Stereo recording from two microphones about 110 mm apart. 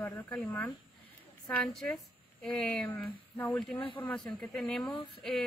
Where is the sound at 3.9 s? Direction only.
15° left (ahead or behind).